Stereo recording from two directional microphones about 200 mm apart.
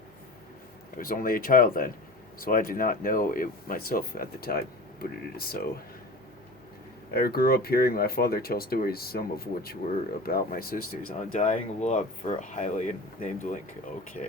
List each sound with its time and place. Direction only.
0.9 s speech: 45° left (ahead or behind)
7.1 s speech: 50° left (ahead or behind); by 14.3 s 35° left (ahead or behind)